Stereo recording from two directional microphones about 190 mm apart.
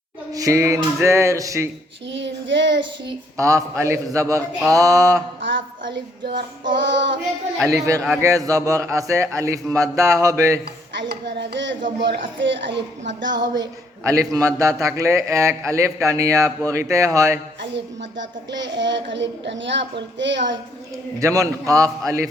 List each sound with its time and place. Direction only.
0.3 s a man's voice: 15° right (ahead or behind)
2.0 s a woman's voice: 70° right (ahead or behind)
3.3 s a man's voice: 15° right (ahead or behind)
5.4 s a woman's voice: 75° right (ahead or behind)
7.7 s a man's voice: 15° right (ahead or behind)
11.1 s a woman's voice: 65° right (ahead or behind)
13.6 s a man's voice: 15° right (ahead or behind)
17.6 s a woman's voice: 70° right (ahead or behind)
21.2 s a man's voice: 15° right (ahead or behind)